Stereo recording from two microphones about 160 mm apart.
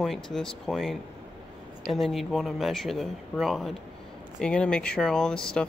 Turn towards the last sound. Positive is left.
turn(degrees=5)  # may be behind; listen again after turning